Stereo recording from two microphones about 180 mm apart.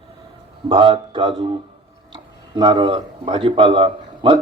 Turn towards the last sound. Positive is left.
turn(degrees=-30)  # may be behind; listen again after turning